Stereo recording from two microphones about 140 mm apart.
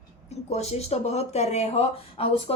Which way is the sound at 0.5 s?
50° left (ahead or behind).